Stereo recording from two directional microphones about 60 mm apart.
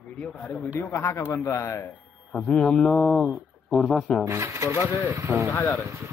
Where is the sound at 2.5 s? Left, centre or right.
Centre.